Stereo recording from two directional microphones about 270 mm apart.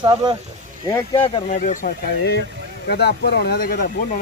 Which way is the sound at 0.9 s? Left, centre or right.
Centre.